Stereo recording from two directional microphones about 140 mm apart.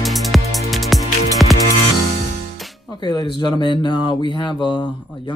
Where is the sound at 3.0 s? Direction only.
30° left (ahead or behind).